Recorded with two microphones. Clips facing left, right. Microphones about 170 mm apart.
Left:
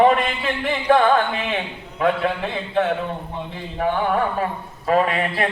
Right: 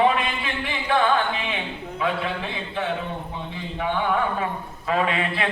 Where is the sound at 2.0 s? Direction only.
55° left (ahead or behind).